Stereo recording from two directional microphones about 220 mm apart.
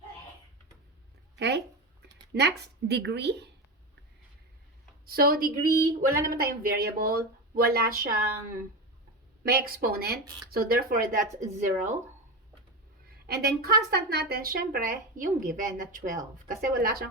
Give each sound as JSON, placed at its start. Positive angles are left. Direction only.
{"t": 1.4, "sound": "speech", "side_deg": -50}
{"t": 5.0, "sound": "a woman's voice", "side_deg": -40}
{"t": 5.6, "sound": "speech", "side_deg": -15}
{"t": 6.2, "sound": "speech", "side_deg": -40}
{"t": 9.4, "sound": "a woman's voice", "side_deg": -40}
{"t": 13.1, "sound": "a woman's voice", "side_deg": -45}